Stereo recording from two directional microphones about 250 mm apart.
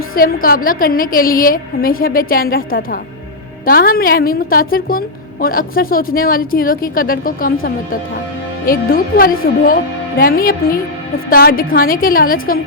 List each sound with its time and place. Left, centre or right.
0.1 s a woman's voice: left